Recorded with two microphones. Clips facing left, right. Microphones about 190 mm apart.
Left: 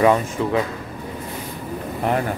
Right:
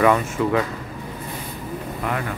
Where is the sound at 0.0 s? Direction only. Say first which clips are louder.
Left 1 dB; 25° left (ahead or behind).